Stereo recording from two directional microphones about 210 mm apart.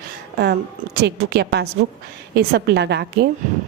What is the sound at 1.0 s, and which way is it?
A woman's voice, 55° right (ahead or behind).